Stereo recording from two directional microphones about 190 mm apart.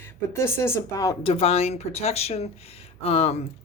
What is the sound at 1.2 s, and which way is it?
Speech, 30° left (ahead or behind).